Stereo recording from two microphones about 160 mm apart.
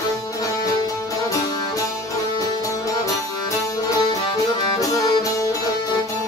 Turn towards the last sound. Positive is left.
turn(degrees=20)  # may be behind; listen again after turning